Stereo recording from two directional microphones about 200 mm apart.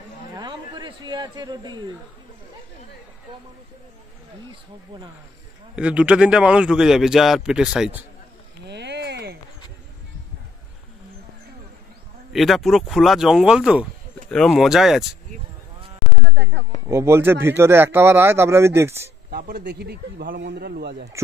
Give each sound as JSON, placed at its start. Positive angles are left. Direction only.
{"t": 0.4, "sound": "speech", "side_deg": -20}
{"t": 5.8, "sound": "a man's voice", "side_deg": -5}
{"t": 8.6, "sound": "a sound", "side_deg": -60}
{"t": 12.3, "sound": "a man's voice", "side_deg": 0}
{"t": 16.3, "sound": "a sound", "side_deg": -60}
{"t": 16.8, "sound": "speech", "side_deg": -15}
{"t": 19.3, "sound": "speech", "side_deg": -50}